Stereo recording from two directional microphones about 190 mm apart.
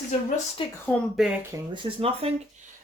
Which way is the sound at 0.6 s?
25° left (ahead or behind).